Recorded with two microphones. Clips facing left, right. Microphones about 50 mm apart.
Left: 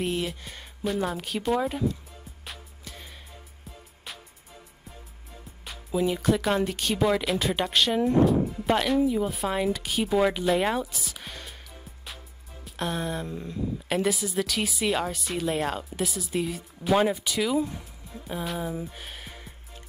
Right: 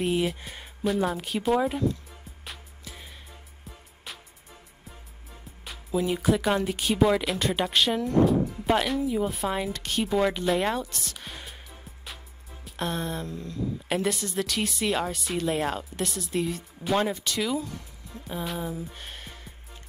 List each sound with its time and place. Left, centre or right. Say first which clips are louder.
0.0 s speech: right 3 dB; centre
2.4 s music: even; centre
5.7 s speech: left 1 dB; centre
11.3 s music: even; centre
12.6 s speech: left 1 dB; centre
13.3 s speech: left 1 dB; left
13.8 s speech: left 2 dB; centre
17.6 s speech: left 6 dB; centre
18.2 s speech: left 1 dB; centre
18.9 s music: even; centre